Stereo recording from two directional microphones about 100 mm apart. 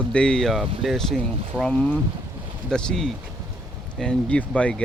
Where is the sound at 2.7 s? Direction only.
5° left (ahead or behind).